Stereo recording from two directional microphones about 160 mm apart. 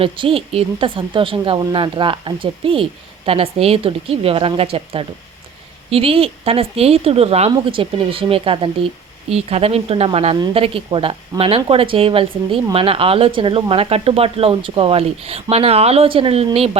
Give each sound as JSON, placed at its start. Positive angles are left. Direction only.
{"t": 0.0, "sound": "speech", "side_deg": -35}